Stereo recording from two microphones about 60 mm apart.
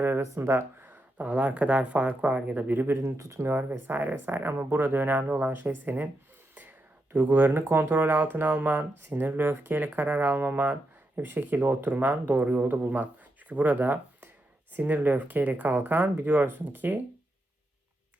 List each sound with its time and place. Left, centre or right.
0.2 s speech: right
0.9 s speech: right
3.0 s speech: right
3.5 s speech: right
9.0 s speech: right
9.2 s speech: right